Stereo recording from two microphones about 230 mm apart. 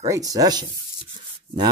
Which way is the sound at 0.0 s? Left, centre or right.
Centre.